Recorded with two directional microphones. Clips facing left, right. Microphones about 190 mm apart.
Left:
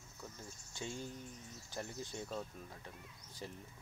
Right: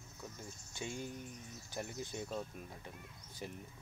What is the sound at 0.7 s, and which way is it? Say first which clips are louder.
Speech: right 1 dB; 15° right (ahead or behind).